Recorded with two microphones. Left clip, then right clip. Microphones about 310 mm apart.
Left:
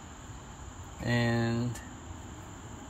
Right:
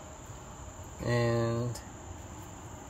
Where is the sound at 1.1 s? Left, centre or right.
Centre.